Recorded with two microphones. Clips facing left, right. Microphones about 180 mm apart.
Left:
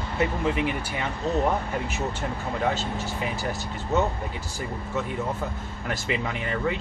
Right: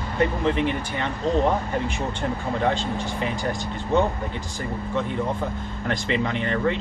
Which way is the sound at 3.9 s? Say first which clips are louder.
Right 3 dB; 5° left (ahead or behind).